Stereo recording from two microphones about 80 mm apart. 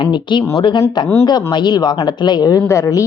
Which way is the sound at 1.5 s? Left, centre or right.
Left.